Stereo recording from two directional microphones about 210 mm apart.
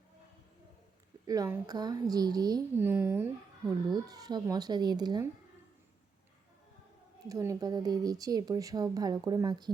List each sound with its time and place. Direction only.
1.3 s speech: 15° right (ahead or behind)
7.3 s speech: 15° right (ahead or behind)